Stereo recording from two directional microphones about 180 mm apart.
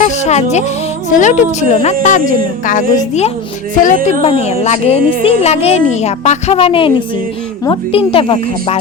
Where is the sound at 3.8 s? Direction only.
40° left (ahead or behind).